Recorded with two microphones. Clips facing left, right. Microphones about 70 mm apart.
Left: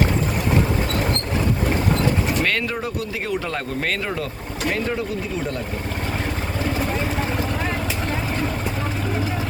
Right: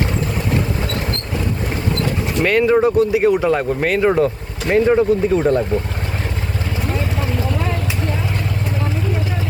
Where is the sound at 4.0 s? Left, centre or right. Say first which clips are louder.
Right 12 dB; right.